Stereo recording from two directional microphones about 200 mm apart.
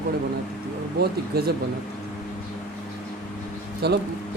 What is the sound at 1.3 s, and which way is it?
Speech, 50° right (ahead or behind).